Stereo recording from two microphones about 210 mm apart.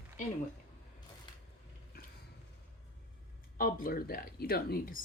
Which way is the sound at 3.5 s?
40° left (ahead or behind).